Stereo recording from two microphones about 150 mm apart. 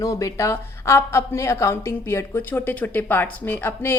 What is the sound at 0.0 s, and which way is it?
A woman's voice, 20° left (ahead or behind).